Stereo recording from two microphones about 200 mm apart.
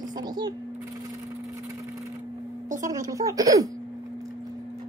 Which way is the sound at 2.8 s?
15° right (ahead or behind).